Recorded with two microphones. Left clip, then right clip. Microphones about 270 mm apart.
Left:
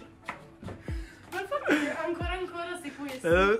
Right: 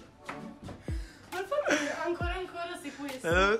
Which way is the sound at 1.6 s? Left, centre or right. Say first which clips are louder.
Left 3 dB; centre.